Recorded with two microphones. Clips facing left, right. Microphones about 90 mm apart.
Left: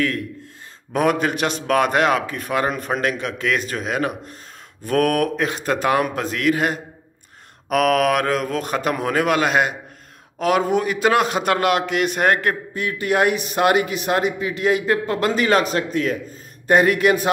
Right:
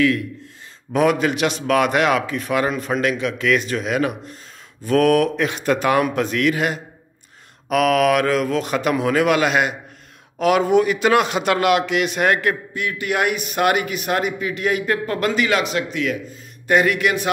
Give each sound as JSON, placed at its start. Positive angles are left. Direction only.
{"t": 0.9, "sound": "a man's voice", "side_deg": 40}